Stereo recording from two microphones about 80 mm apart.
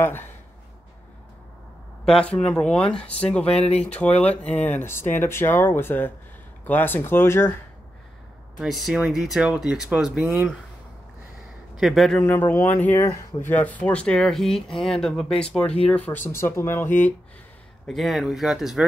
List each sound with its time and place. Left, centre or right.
2.0 s speech: centre; by 7.5 s left
8.5 s speech: centre
11.7 s a man's voice: centre
12.2 s speech: left
16.3 s speech: left
17.8 s speech: centre